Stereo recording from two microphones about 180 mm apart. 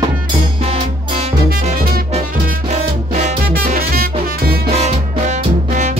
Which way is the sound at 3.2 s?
50° right (ahead or behind).